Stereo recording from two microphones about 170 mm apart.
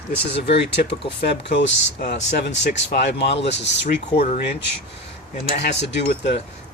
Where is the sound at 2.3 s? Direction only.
90° left.